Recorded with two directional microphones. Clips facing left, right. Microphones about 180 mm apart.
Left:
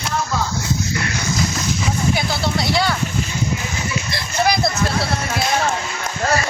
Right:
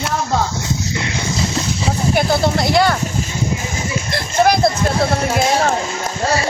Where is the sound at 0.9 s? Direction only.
25° right (ahead or behind).